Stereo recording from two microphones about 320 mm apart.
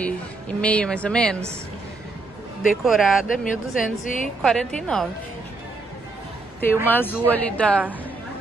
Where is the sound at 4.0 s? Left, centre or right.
Left.